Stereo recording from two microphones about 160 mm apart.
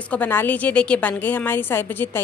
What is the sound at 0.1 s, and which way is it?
A woman's voice, 10° left (ahead or behind).